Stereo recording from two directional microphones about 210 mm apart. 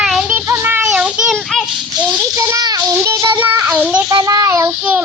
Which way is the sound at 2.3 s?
15° right (ahead or behind).